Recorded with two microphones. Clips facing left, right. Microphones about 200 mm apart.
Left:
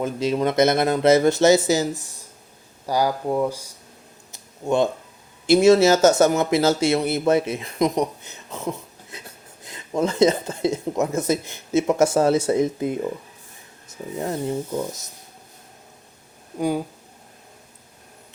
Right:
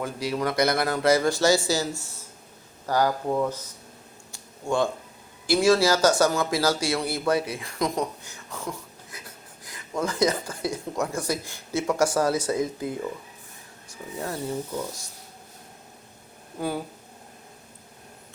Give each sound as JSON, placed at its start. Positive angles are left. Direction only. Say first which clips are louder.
{"t": 0.0, "sound": "speech", "louder": "left 6 dB", "side_deg": 25}
{"t": 4.3, "sound": "a sound", "louder": "left 5 dB", "side_deg": 20}
{"t": 5.5, "sound": "speech", "louder": "left 6 dB", "side_deg": 20}
{"t": 16.6, "sound": "speech", "louder": "left 6 dB", "side_deg": 15}